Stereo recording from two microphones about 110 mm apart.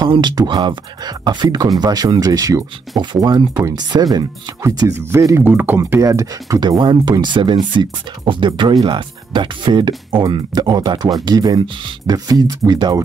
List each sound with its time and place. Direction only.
0.0 s speech: 40° right (ahead or behind)
3.0 s speech: 45° right (ahead or behind)
5.4 s speech: 15° right (ahead or behind)
5.8 s speech: 30° right (ahead or behind)
6.8 s speech: 45° right (ahead or behind)